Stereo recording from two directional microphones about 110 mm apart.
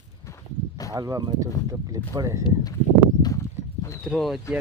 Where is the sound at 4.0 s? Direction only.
Centre (ahead or behind).